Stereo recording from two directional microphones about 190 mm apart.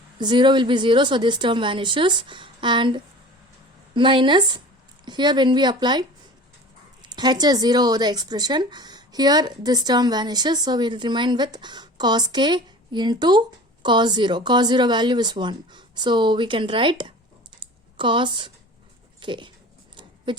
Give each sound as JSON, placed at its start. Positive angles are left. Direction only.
{"t": 0.2, "sound": "a woman's voice", "side_deg": -25}
{"t": 17.6, "sound": "computer keyboard", "side_deg": -25}
{"t": 19.2, "sound": "dog", "side_deg": -25}
{"t": 20.3, "sound": "speech", "side_deg": -25}